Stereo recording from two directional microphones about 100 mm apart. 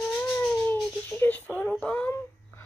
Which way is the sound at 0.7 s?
20° left (ahead or behind).